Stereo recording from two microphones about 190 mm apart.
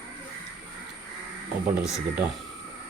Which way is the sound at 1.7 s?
5° right (ahead or behind).